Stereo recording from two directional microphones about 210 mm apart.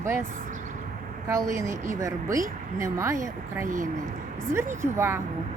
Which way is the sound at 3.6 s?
40° right (ahead or behind).